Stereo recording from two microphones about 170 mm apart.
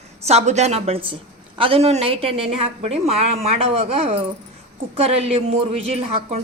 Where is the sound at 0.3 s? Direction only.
40° right (ahead or behind).